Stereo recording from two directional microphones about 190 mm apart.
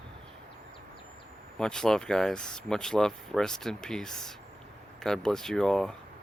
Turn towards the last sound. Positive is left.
turn(degrees=5)  # may be behind; listen again after turning